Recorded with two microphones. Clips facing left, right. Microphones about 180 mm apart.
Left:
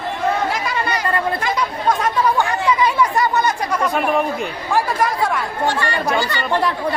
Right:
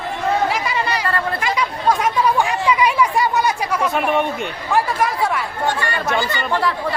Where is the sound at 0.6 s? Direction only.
5° right (ahead or behind).